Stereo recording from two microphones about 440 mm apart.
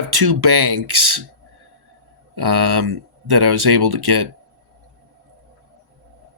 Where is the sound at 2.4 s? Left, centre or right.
Right.